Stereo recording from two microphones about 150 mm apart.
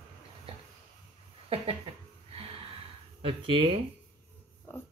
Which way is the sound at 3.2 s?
35° right (ahead or behind).